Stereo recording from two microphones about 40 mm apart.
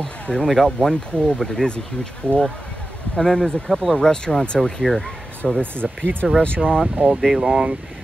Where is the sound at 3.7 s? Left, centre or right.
Centre.